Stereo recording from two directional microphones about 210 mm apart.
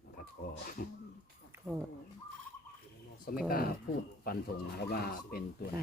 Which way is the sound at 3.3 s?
45° left (ahead or behind).